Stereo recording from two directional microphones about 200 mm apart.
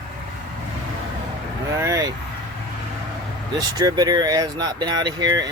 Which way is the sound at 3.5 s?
20° right (ahead or behind).